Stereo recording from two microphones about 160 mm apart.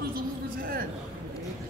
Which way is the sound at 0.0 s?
65° right (ahead or behind).